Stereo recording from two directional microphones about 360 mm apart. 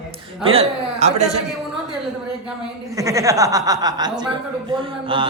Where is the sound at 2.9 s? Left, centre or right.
Centre.